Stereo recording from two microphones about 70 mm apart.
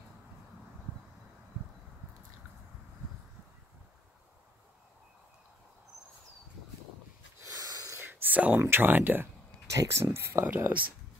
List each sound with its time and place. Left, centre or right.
7.5 s a sound: right
8.0 s a sound: right
8.5 s speech: right
9.7 s speech: right
10.1 s speech: right
10.4 s speech: right